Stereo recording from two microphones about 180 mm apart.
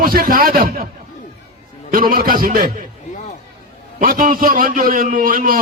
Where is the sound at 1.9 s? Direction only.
55° right (ahead or behind).